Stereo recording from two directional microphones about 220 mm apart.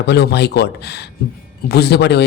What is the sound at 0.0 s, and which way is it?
Speech, 50° left (ahead or behind).